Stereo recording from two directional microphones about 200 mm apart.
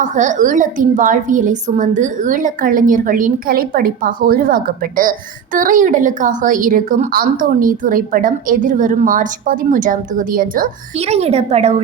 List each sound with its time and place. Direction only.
0.0 s a woman's voice: 40° right (ahead or behind)
10.9 s a woman's voice: 30° right (ahead or behind)